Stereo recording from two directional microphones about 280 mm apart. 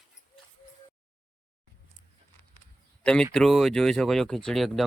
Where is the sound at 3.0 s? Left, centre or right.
Centre.